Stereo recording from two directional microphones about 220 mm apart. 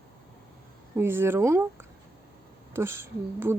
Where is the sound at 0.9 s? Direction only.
10° right (ahead or behind).